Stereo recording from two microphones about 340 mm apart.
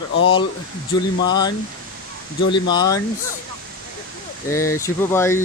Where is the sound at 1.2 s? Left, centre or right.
Centre.